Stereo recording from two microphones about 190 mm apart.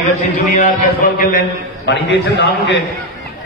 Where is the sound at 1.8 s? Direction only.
65° left (ahead or behind).